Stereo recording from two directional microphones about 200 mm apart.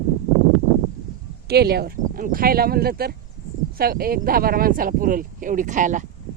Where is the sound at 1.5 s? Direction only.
50° right (ahead or behind).